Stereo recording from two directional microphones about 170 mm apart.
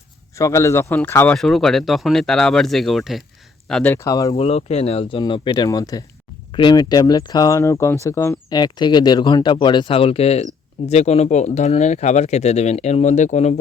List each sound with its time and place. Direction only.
0.3 s a man's voice: 20° left (ahead or behind)
1.4 s speech: centre (ahead or behind)
3.9 s speech: 20° left (ahead or behind)
4.4 s speech: 40° left (ahead or behind)